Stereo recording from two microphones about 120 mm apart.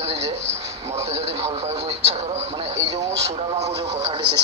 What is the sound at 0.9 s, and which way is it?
Speech, 60° right (ahead or behind).